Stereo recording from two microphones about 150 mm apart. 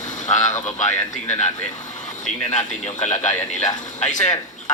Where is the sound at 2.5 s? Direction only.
50° left (ahead or behind).